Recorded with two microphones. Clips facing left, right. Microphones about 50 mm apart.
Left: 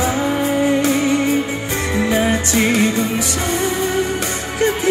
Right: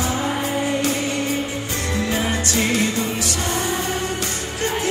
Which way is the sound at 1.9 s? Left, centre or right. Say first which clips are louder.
Left 6 dB; left.